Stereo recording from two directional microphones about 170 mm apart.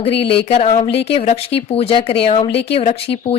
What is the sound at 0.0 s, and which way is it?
Speech, 35° left (ahead or behind).